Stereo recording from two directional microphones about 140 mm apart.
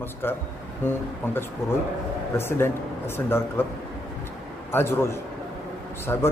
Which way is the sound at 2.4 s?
15° left (ahead or behind).